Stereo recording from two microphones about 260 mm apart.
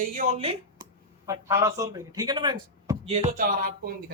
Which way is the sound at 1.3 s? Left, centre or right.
Centre.